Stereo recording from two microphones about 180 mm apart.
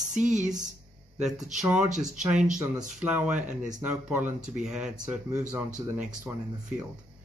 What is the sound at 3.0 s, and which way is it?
Speech, 5° right (ahead or behind).